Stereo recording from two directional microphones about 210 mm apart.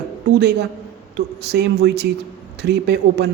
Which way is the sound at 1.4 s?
50° right (ahead or behind).